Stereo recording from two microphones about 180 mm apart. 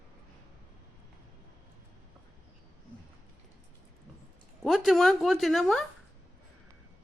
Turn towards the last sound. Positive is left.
turn(degrees=0)  # may be behind; listen again after turning